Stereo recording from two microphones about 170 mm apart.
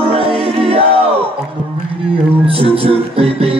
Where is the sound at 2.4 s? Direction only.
30° right (ahead or behind).